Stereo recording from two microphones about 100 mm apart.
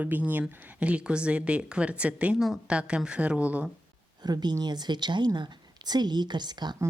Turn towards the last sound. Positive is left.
turn(degrees=-45)  # may be behind; listen again after turning